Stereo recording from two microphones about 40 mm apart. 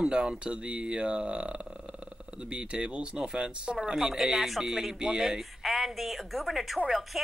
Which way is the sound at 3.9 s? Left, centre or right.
Centre.